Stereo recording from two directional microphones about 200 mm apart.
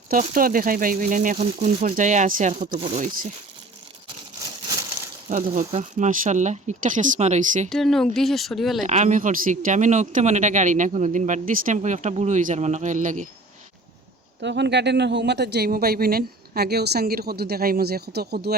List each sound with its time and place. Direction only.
0.1 s speech: 45° right (ahead or behind)
5.3 s speech: 40° right (ahead or behind)
7.7 s speech: centre (ahead or behind)
8.8 s speech: 35° right (ahead or behind)
14.4 s speech: 60° right (ahead or behind)